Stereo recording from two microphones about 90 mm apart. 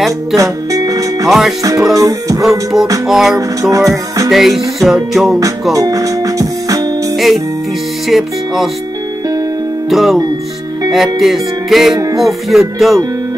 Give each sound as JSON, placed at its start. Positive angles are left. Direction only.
{"t": 0.4, "sound": "music", "side_deg": -40}
{"t": 3.1, "sound": "music", "side_deg": -5}
{"t": 5.4, "sound": "music", "side_deg": -40}
{"t": 8.1, "sound": "music", "side_deg": 0}
{"t": 9.8, "sound": "music", "side_deg": 0}